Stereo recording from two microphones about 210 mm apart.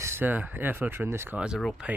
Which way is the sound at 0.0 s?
10° right (ahead or behind).